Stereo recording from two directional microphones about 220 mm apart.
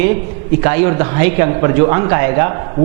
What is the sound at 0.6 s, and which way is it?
A man's voice, 15° right (ahead or behind).